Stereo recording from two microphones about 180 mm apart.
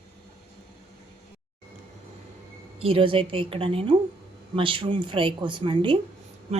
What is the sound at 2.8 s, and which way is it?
Speech, 30° right (ahead or behind).